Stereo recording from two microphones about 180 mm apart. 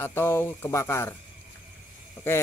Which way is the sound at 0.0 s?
15° left (ahead or behind).